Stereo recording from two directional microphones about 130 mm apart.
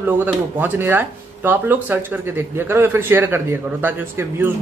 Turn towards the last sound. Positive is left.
turn(degrees=-15)  # may be behind; listen again after turning